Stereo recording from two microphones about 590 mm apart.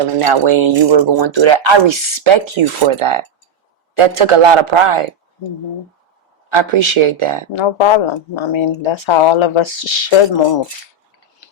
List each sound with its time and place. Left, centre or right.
0.0 s speech: right
6.5 s speech: right
7.5 s speech: left